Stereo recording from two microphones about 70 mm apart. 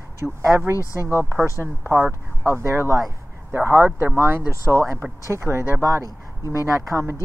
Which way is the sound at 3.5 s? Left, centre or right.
Right.